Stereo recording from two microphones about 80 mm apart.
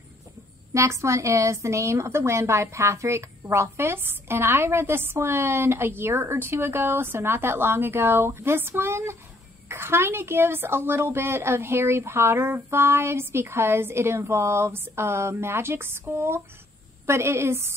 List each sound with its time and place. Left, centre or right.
0.7 s a woman's voice: right